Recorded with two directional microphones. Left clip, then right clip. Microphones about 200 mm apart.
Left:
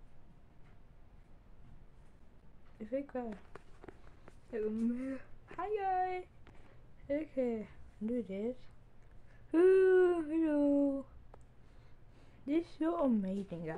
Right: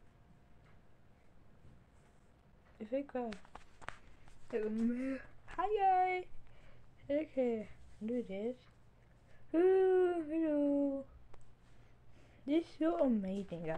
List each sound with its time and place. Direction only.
2.8 s speech: 5° left (ahead or behind)
4.5 s speech: 10° right (ahead or behind)
7.1 s speech: centre (ahead or behind); by 8.6 s 15° left (ahead or behind)
9.5 s a sound: 25° left (ahead or behind)
12.4 s a woman's voice: centre (ahead or behind)